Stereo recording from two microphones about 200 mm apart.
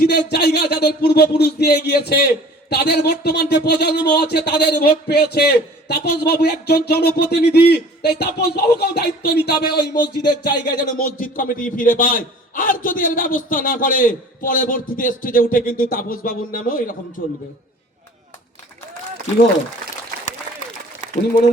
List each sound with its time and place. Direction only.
0.1 s speech: 55° left (ahead or behind)
2.6 s a sound: 55° left (ahead or behind)
10.9 s a man's voice: 45° left (ahead or behind)